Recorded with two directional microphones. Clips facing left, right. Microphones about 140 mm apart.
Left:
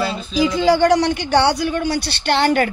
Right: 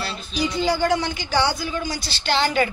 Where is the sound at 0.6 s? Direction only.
85° left.